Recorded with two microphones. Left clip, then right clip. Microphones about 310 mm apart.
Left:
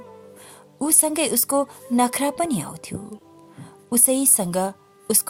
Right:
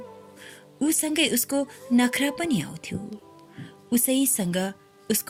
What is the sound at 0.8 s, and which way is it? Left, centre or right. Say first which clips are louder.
A woman's voice: left 1 dB; centre.